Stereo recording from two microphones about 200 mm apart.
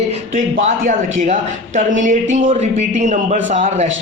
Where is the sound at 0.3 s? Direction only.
40° right (ahead or behind).